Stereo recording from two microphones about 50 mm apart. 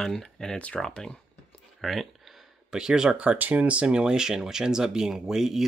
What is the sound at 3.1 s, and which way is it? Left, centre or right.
Speech, right.